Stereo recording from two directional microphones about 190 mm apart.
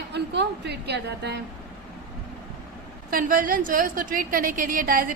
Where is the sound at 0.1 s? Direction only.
65° right (ahead or behind).